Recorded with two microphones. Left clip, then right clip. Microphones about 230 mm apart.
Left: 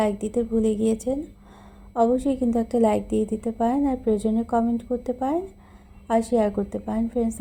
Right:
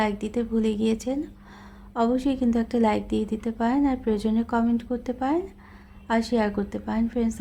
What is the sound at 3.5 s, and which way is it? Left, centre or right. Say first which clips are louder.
A woman's voice: right 1 dB; right.